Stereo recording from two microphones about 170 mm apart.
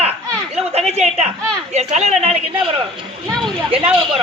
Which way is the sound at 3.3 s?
Centre (ahead or behind).